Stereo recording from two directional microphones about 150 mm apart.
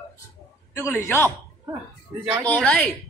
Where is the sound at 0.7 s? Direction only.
15° left (ahead or behind).